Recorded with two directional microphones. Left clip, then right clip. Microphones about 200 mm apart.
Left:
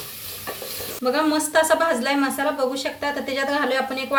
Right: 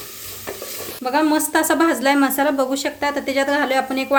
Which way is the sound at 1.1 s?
50° right (ahead or behind).